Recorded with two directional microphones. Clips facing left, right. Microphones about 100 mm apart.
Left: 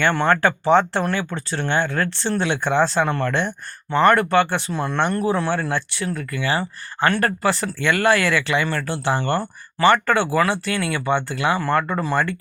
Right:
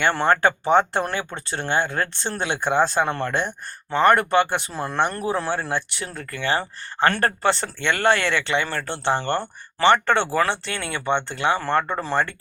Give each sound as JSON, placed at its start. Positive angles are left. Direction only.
{"t": 0.1, "sound": "speech", "side_deg": -30}
{"t": 3.1, "sound": "speech", "side_deg": -30}
{"t": 4.7, "sound": "speech", "side_deg": -35}
{"t": 5.5, "sound": "speech", "side_deg": -20}